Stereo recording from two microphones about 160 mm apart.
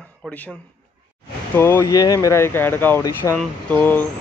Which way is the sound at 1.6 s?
15° left (ahead or behind).